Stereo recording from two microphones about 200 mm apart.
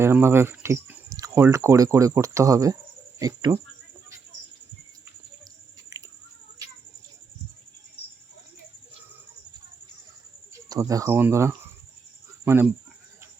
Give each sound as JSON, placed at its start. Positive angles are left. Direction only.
{"t": 0.0, "sound": "speech", "side_deg": -10}
{"t": 10.5, "sound": "speech", "side_deg": -15}